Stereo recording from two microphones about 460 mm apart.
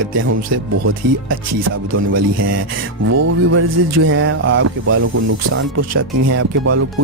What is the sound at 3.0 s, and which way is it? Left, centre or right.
Speech, right.